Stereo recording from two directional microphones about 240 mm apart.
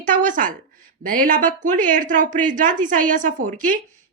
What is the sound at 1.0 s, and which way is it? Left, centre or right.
A woman's voice, right.